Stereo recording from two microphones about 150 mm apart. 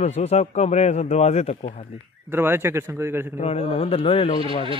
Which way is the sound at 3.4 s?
45° left (ahead or behind).